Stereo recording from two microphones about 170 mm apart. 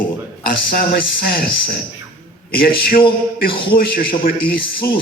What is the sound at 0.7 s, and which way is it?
A man's voice, 60° left (ahead or behind).